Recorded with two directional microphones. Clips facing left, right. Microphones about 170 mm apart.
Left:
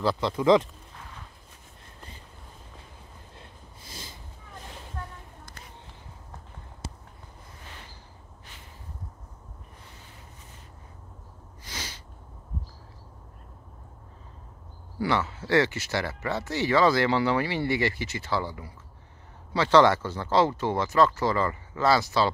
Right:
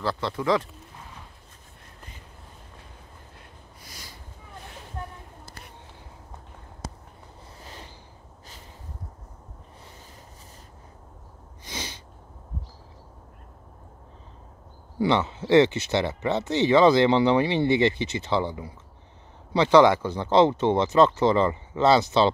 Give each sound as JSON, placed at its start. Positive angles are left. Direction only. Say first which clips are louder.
{"t": 0.0, "sound": "speech", "louder": "left 3 dB", "side_deg": 15}
{"t": 3.3, "sound": "snort", "louder": "even", "side_deg": 25}
{"t": 11.6, "sound": "sneeze", "louder": "right 4 dB", "side_deg": -20}
{"t": 15.0, "sound": "speech", "louder": "right 4 dB", "side_deg": -20}